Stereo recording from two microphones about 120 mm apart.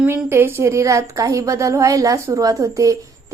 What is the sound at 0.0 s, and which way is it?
A woman's voice, 20° right (ahead or behind).